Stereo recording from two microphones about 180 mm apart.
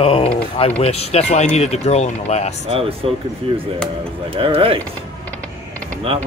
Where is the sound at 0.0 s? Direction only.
30° left (ahead or behind).